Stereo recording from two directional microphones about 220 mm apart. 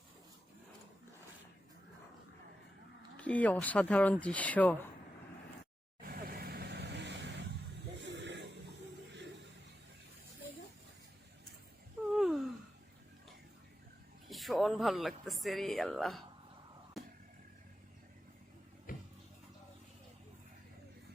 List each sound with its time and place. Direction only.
3.2 s speech: 5° left (ahead or behind)
6.0 s vehicle: 40° right (ahead or behind)
7.9 s a sound: 55° right (ahead or behind)
12.1 s gasp: centre (ahead or behind)
14.3 s speech: centre (ahead or behind)
18.9 s a sound: 40° left (ahead or behind)